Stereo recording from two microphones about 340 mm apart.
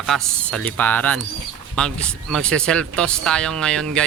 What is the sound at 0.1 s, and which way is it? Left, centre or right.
Speech, centre.